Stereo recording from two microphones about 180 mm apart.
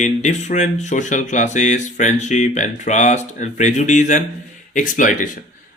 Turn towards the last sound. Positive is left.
turn(degrees=45)  # may be behind; listen again after turning